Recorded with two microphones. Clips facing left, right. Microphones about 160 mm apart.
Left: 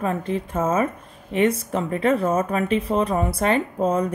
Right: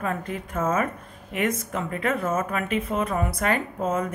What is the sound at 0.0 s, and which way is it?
A woman's voice, 30° left (ahead or behind).